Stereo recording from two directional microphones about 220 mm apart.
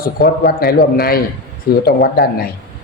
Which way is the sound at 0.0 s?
45° left (ahead or behind).